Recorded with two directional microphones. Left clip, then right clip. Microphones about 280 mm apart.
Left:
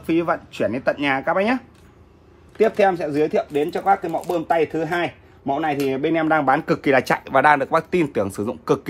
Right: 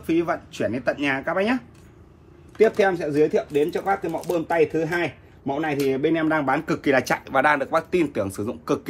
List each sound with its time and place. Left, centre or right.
0.0 s speech: left